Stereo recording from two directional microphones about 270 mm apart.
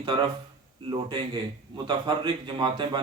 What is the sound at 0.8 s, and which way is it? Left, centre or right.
A man's voice, centre.